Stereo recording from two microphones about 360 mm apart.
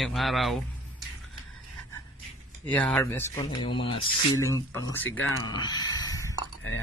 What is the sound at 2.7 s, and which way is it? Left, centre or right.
Speech, centre.